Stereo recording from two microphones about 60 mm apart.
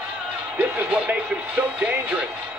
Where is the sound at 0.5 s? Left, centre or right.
Right.